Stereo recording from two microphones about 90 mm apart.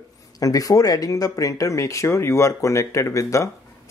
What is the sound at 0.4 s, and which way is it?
Speech, 40° left (ahead or behind).